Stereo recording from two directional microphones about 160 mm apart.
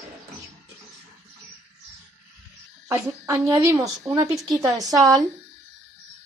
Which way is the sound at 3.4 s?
20° right (ahead or behind).